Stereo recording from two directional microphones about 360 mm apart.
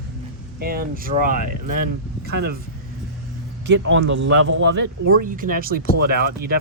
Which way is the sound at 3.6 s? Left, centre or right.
Right.